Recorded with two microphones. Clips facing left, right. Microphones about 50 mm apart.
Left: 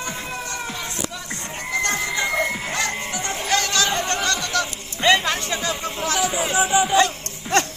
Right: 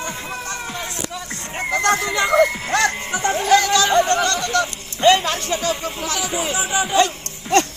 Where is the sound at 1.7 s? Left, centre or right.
Right.